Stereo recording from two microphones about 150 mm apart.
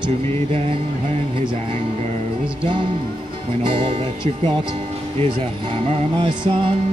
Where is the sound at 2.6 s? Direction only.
35° right (ahead or behind).